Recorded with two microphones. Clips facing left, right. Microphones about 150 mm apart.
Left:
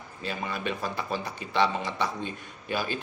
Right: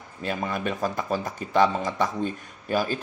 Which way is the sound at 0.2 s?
50° right (ahead or behind).